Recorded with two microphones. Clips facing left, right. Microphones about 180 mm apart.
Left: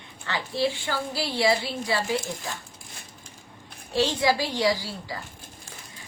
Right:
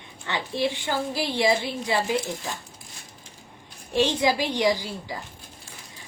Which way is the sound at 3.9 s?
20° right (ahead or behind).